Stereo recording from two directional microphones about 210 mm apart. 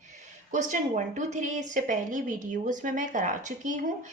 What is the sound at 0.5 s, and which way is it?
A woman's voice, 35° right (ahead or behind).